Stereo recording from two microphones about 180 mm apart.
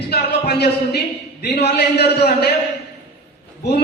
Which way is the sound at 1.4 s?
65° left (ahead or behind).